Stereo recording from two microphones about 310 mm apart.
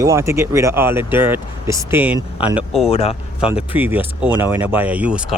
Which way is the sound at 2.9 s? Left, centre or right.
Centre.